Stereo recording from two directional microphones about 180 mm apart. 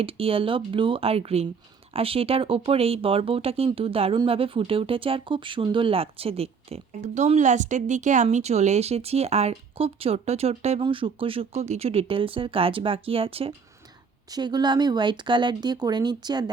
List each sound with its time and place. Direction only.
0.0 s speech: 30° right (ahead or behind)